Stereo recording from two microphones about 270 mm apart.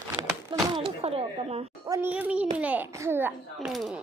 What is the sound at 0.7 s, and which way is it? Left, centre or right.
Speech, centre.